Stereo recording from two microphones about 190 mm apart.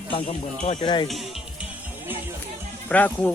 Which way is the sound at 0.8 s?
25° left (ahead or behind).